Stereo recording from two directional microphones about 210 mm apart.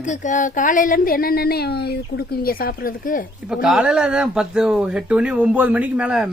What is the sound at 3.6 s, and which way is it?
Speech, 5° right (ahead or behind).